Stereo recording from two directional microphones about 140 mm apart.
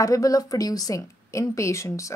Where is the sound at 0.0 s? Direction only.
25° left (ahead or behind).